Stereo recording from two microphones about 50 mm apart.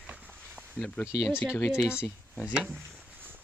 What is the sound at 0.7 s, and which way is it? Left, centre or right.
Speech, left.